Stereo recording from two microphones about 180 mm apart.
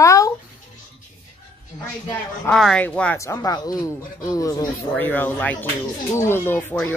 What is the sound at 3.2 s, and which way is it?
Speech, 20° left (ahead or behind).